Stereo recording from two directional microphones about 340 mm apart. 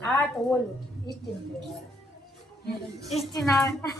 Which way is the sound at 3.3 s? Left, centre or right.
Centre.